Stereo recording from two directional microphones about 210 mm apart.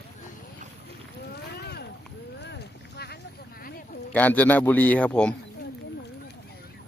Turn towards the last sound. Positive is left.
turn(degrees=5)  # may be behind; listen again after turning